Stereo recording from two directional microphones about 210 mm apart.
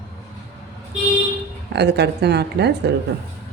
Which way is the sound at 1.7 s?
50° right (ahead or behind).